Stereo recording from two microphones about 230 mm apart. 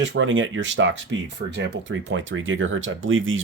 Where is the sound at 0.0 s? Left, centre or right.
Right.